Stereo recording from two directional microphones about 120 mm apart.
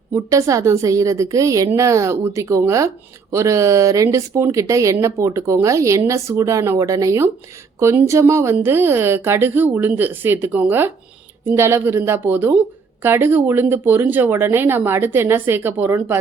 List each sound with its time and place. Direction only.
0.1 s a woman's voice: 25° right (ahead or behind)